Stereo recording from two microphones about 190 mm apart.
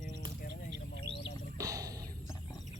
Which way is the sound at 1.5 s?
20° right (ahead or behind).